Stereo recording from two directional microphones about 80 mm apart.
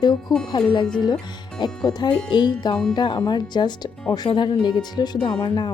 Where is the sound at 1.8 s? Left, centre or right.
Left.